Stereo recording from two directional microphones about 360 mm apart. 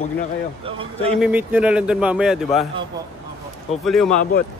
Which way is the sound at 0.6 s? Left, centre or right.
Centre.